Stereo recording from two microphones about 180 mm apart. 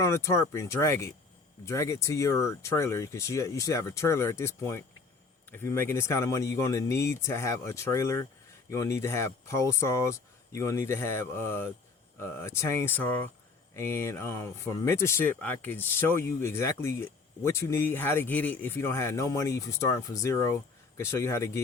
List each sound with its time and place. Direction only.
0.0 s speech: 15° left (ahead or behind)